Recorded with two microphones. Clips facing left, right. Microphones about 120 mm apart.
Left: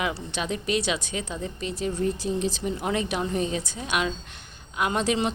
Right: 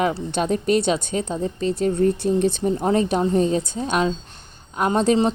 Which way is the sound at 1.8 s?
55° right (ahead or behind).